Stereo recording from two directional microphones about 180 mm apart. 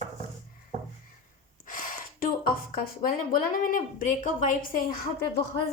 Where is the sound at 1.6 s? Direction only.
50° left (ahead or behind).